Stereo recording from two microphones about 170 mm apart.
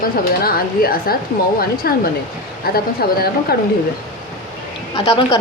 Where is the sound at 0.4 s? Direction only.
60° left (ahead or behind).